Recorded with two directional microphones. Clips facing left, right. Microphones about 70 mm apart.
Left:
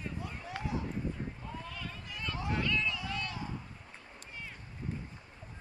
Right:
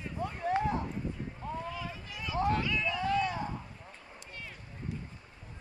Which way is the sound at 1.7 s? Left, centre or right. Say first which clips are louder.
Right 4 dB; centre.